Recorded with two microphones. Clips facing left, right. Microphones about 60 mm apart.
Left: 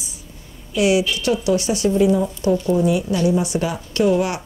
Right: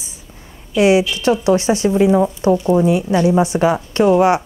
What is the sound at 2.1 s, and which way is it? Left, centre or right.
Speech, right.